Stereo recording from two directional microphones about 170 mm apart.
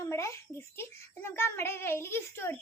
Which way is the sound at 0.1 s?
15° left (ahead or behind).